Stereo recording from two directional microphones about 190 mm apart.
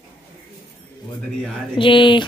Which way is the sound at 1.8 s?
25° left (ahead or behind).